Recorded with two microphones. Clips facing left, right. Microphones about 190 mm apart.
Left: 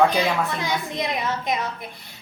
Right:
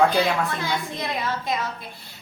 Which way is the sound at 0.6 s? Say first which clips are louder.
Left 2 dB; 20° left (ahead or behind).